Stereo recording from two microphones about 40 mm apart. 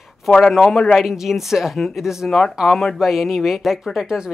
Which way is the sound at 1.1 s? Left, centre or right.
Centre.